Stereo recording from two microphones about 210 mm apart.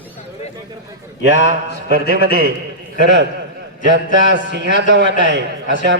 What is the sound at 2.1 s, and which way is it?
A man's voice, 45° right (ahead or behind).